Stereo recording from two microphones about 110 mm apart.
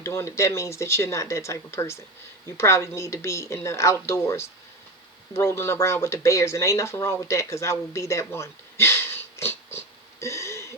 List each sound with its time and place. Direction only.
0.0 s speech: 25° left (ahead or behind)